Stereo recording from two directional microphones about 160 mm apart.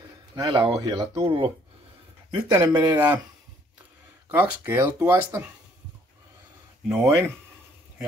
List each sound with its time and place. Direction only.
0.4 s speech: 30° right (ahead or behind)
1.1 s speech: 35° right (ahead or behind)
2.5 s speech: 15° right (ahead or behind)
4.3 s speech: 15° right (ahead or behind)
6.9 s speech: 15° right (ahead or behind)